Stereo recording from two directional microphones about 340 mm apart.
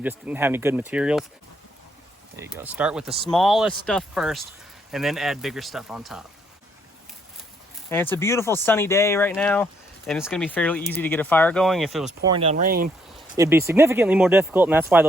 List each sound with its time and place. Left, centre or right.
0.0 s speech: centre
2.3 s speech: centre
7.9 s speech: centre
12.0 s speech: centre
13.1 s speech: centre